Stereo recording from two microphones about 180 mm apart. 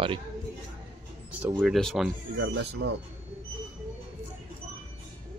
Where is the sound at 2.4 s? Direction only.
90° right.